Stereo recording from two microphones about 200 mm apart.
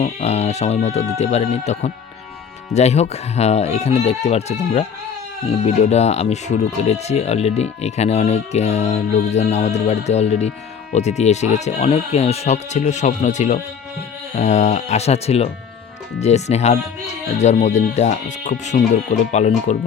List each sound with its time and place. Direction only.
0.0 s speech: 35° left (ahead or behind)
5.6 s speech: 35° left (ahead or behind)